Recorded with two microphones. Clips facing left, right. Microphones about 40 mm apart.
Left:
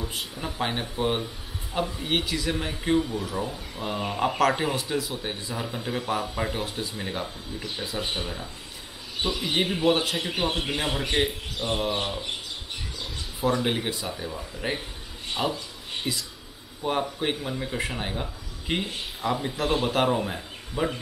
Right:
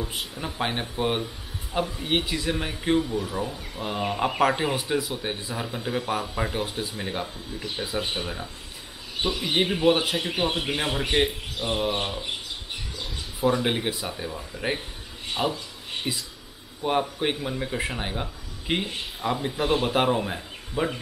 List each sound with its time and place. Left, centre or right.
0.0 s speech: centre
15.3 s a sound: centre
17.0 s speech: centre